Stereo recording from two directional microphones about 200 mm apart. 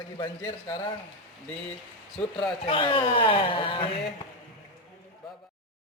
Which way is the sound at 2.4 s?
25° left (ahead or behind).